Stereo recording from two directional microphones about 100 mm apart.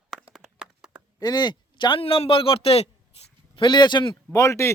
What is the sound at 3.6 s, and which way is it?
Speech, 50° left (ahead or behind).